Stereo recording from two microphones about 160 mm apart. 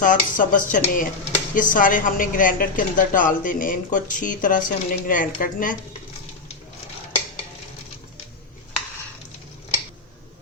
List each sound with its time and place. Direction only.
0.0 s speech: 55° left (ahead or behind)